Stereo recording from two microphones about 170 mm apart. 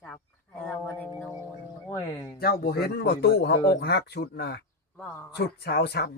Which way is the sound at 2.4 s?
65° left (ahead or behind).